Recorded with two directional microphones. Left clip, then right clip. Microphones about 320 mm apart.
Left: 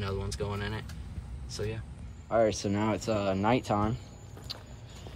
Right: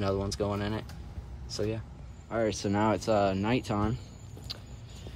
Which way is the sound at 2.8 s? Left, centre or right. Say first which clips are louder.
Right 5 dB; centre.